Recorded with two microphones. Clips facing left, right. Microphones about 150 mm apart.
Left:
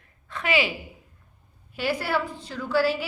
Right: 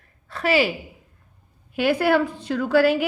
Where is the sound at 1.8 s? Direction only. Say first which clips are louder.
Right 7 dB; 60° right (ahead or behind).